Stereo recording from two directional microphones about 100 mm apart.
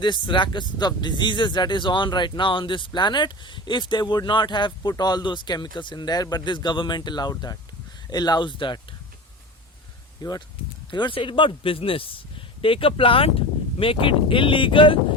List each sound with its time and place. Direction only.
0.0 s speech: 50° left (ahead or behind)
10.2 s speech: 45° left (ahead or behind)